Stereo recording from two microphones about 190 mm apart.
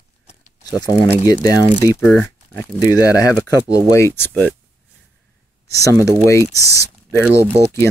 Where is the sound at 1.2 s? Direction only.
20° left (ahead or behind).